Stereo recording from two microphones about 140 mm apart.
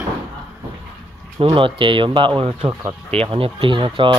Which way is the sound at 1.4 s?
40° right (ahead or behind).